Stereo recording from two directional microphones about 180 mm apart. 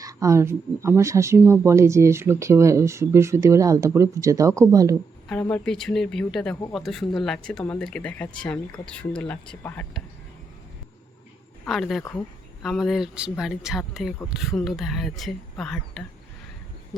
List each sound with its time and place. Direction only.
0.0 s speech: 20° right (ahead or behind)
5.3 s speech: 10° left (ahead or behind)
11.6 s speech: centre (ahead or behind)